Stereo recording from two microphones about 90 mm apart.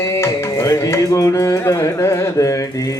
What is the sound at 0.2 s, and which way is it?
Carnatic music, 35° left (ahead or behind).